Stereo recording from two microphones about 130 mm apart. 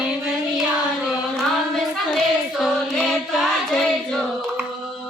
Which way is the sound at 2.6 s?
5° left (ahead or behind).